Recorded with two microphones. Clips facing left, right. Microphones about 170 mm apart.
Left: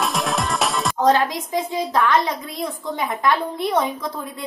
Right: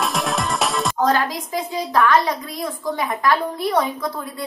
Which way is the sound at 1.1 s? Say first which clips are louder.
Left 2 dB; 25° left (ahead or behind).